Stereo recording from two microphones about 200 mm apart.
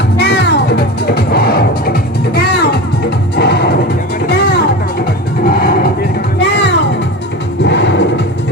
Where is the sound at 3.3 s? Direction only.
55° left (ahead or behind).